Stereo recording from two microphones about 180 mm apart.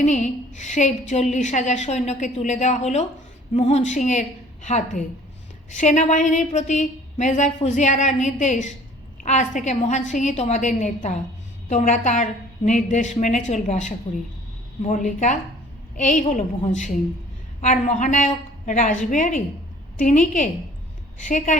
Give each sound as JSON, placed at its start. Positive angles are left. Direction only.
{"t": 0.0, "sound": "a woman's voice", "side_deg": 40}